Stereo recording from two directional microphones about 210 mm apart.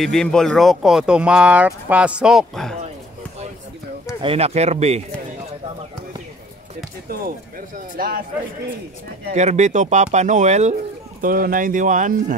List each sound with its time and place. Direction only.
0.0 s speech: 5° left (ahead or behind)
4.2 s speech: 30° right (ahead or behind)
9.3 s speech: 35° right (ahead or behind)